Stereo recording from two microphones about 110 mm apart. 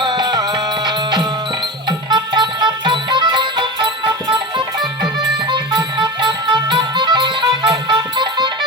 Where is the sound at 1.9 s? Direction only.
45° right (ahead or behind).